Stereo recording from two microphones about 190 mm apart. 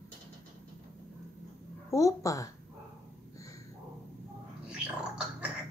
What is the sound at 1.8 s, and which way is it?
Speech, 15° left (ahead or behind).